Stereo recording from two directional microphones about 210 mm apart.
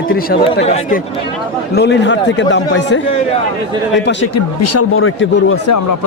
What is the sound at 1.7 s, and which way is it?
A man's voice, 55° left (ahead or behind).